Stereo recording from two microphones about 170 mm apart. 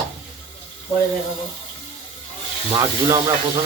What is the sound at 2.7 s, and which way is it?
Speech, 20° right (ahead or behind).